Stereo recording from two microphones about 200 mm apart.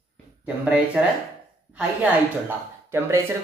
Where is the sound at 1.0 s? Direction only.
5° right (ahead or behind).